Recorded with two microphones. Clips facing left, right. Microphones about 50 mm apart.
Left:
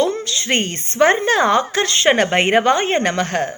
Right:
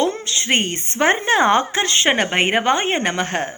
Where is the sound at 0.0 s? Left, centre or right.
Right.